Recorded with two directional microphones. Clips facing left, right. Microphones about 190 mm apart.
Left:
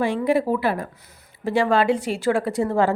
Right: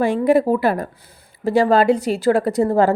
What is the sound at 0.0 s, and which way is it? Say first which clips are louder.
A woman's voice: right 5 dB; 45° right (ahead or behind).